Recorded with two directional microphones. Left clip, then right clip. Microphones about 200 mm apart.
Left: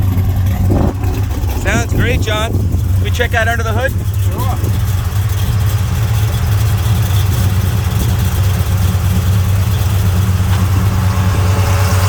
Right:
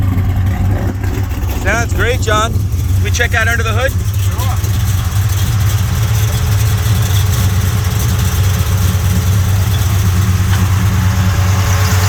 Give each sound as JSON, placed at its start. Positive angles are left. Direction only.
{"t": 1.6, "sound": "speech", "side_deg": 5}
{"t": 3.2, "sound": "speech", "side_deg": 15}